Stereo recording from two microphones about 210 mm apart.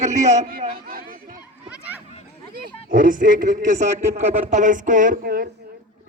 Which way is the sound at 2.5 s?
40° right (ahead or behind).